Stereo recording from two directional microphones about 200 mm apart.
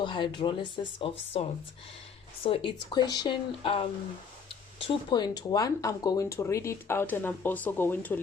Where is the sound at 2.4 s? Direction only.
25° left (ahead or behind).